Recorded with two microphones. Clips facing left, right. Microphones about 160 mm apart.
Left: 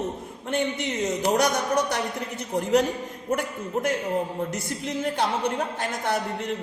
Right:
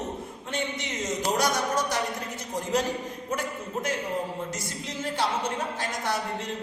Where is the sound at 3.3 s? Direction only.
50° left (ahead or behind).